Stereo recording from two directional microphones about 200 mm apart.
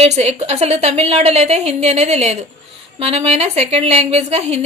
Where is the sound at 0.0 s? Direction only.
35° right (ahead or behind).